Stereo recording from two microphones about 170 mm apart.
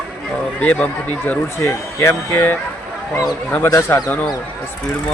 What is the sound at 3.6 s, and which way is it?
Speech, 15° left (ahead or behind).